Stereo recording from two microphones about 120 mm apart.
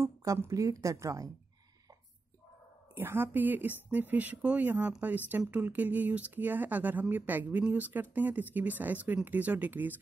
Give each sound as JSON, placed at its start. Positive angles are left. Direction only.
{"t": 0.0, "sound": "a woman's voice", "side_deg": -30}
{"t": 3.0, "sound": "speech", "side_deg": -20}